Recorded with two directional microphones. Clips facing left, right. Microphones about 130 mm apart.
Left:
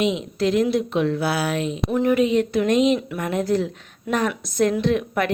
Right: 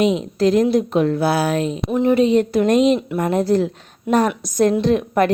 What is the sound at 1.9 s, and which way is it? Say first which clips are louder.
Speech: right 4 dB; 25° right (ahead or behind).